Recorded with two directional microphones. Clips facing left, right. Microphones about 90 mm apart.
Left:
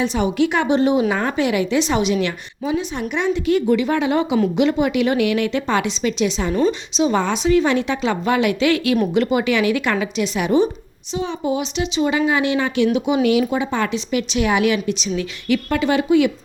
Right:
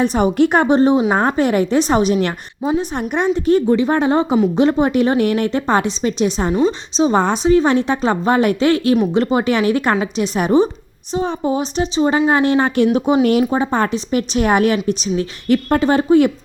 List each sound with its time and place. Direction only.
0.0 s a woman's voice: 50° right (ahead or behind)